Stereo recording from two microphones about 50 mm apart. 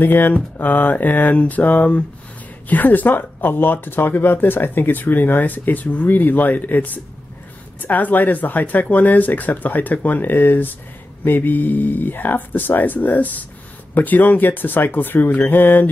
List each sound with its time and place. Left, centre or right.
0.0 s speech: left